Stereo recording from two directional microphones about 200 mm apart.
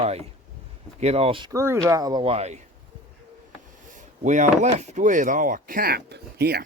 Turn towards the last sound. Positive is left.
turn(degrees=-50)  # may be behind; listen again after turning